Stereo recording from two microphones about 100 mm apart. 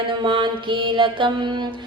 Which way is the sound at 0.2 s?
55° right (ahead or behind).